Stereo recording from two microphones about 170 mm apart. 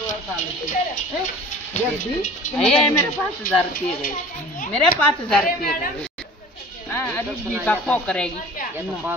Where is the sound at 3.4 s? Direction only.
60° left (ahead or behind).